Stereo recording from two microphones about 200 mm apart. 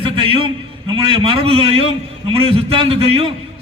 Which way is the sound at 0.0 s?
25° right (ahead or behind).